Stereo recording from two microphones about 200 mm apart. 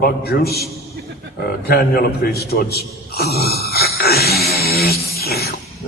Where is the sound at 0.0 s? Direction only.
50° left (ahead or behind).